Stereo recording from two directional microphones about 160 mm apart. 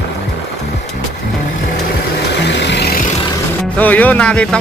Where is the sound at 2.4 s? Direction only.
90° left.